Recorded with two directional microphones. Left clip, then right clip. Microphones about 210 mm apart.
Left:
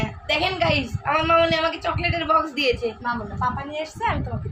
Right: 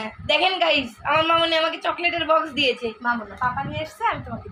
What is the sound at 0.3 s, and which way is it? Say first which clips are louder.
A woman's voice: right 3 dB; 15° left (ahead or behind).